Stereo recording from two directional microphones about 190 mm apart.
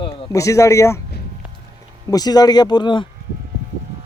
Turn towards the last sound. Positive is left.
turn(degrees=25)  # may be behind; listen again after turning